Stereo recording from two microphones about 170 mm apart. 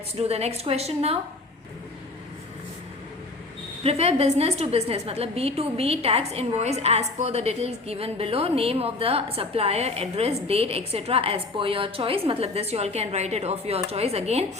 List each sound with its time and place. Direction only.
0.2 s a woman's voice: 35° right (ahead or behind)
3.8 s a woman's voice: 35° right (ahead or behind)